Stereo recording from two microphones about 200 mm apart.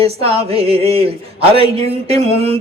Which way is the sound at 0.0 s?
30° right (ahead or behind).